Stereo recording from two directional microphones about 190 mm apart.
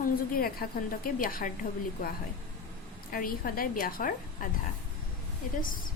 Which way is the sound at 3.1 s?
50° left (ahead or behind).